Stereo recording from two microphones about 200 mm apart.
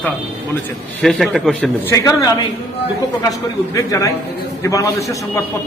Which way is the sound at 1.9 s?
15° left (ahead or behind).